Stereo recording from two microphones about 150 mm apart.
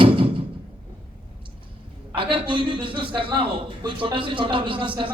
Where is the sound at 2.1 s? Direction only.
35° right (ahead or behind).